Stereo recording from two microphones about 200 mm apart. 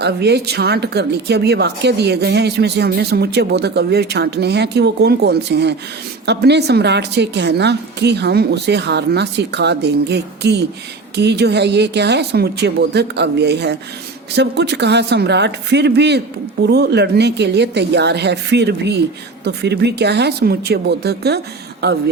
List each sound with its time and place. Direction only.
0.0 s speech: 55° right (ahead or behind)